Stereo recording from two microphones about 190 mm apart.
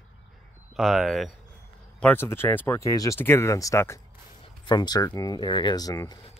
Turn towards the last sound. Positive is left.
turn(degrees=20)  # may be behind; listen again after turning